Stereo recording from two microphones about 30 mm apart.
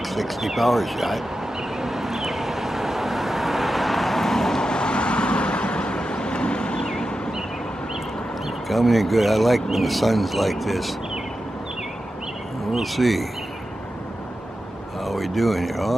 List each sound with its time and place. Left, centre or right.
0.1 s speech: centre
1.8 s vehicle: centre
4.6 s vehicle: left
6.9 s a sound: left
8.6 s speech: centre
12.7 s speech: centre
15.0 s speech: centre